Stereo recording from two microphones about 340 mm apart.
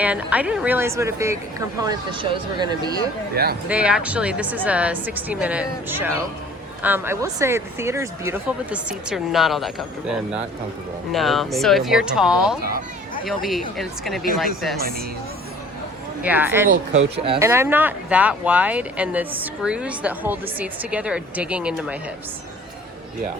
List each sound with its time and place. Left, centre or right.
0.0 s speech: centre
3.3 s speech: right
3.7 s speech: centre
14.8 s speech: right
16.2 s speech: centre
16.6 s speech: right; by 21.9 s centre